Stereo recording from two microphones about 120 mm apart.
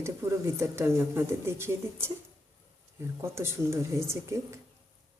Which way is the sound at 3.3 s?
20° right (ahead or behind).